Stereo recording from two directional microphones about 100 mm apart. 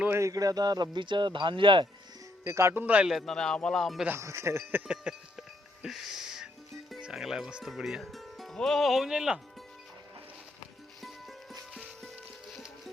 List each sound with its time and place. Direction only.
0.0 s speech: 25° right (ahead or behind); by 1.9 s 55° right (ahead or behind)
2.5 s speech: 30° right (ahead or behind)
2.8 s a man's voice: 15° right (ahead or behind)
3.1 s a man's voice: centre (ahead or behind)
4.2 s speech: 30° right (ahead or behind)
4.9 s music: 10° right (ahead or behind)
7.0 s speech: 5° right (ahead or behind)
12.0 s music: centre (ahead or behind)